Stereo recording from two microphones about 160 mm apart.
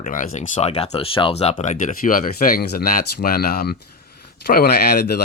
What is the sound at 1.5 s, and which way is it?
Speech, 50° left (ahead or behind).